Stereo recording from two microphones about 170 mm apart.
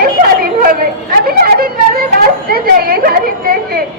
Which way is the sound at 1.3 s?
60° right (ahead or behind).